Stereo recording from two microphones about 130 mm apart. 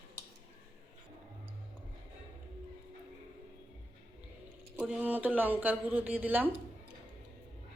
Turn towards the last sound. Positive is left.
turn(degrees=-15)  # may be behind; listen again after turning